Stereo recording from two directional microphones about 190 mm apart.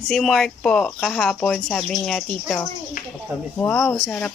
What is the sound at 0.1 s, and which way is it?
Speech, centre (ahead or behind).